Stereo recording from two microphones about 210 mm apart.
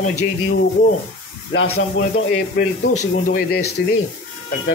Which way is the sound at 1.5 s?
80° left.